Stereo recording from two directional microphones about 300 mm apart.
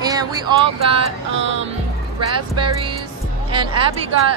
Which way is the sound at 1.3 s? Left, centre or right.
Right.